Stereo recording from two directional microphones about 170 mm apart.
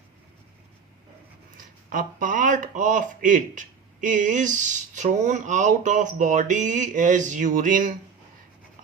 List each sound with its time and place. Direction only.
1.5 s speech: 55° right (ahead or behind)